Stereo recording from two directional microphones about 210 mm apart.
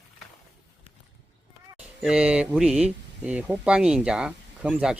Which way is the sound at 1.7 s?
5° right (ahead or behind).